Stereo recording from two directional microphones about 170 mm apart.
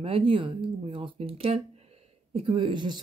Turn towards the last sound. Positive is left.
turn(degrees=-25)  # may be behind; listen again after turning